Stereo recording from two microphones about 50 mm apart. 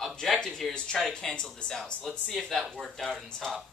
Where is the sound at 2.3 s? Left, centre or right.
Centre.